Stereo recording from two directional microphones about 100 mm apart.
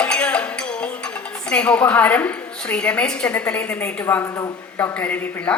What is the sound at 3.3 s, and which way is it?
A woman's voice, 15° left (ahead or behind).